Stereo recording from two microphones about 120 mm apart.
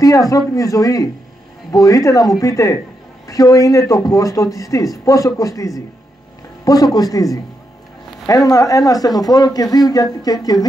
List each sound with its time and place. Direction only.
0.0 s a man's voice: 30° left (ahead or behind)
8.3 s speech: 30° left (ahead or behind)